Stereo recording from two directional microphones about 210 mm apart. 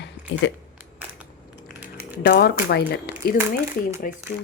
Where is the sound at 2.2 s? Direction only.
50° left (ahead or behind).